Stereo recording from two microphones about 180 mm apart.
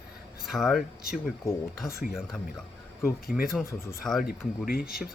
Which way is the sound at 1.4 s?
15° left (ahead or behind).